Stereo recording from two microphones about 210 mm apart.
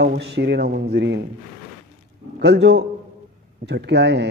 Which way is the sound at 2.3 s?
55° right (ahead or behind).